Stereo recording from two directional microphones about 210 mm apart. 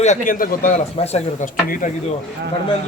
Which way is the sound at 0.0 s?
35° left (ahead or behind).